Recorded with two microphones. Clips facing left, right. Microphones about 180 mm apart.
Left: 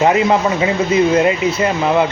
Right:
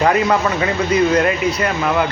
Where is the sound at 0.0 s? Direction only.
20° left (ahead or behind).